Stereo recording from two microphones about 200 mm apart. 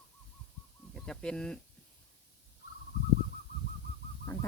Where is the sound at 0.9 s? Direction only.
5° left (ahead or behind).